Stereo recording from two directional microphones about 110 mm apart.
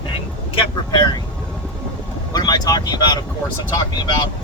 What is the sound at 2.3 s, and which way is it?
Vehicle, 35° left (ahead or behind).